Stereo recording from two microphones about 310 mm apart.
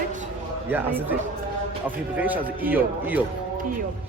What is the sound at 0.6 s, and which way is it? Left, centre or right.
Speech, centre.